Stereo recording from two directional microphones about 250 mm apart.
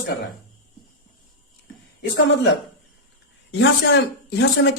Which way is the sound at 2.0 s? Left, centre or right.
Left.